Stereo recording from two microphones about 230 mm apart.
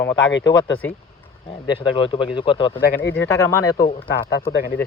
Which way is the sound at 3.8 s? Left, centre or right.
Left.